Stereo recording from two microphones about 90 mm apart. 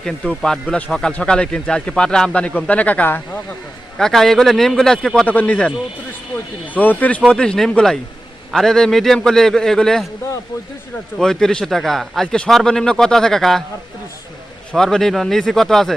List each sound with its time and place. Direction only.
0.0 s a man's voice: 5° left (ahead or behind)
3.9 s a man's voice: 5° left (ahead or behind)
5.2 s speech: 15° left (ahead or behind)
6.7 s a man's voice: 20° left (ahead or behind)
11.2 s a man's voice: 5° left (ahead or behind)
14.7 s a man's voice: 5° left (ahead or behind)